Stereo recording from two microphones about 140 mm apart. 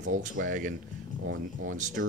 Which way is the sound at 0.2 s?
70° right (ahead or behind).